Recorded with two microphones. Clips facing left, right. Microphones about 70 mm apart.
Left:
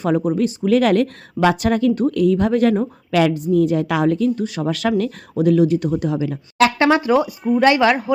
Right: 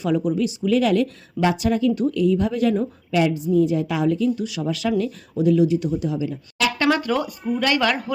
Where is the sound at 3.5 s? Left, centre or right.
Left.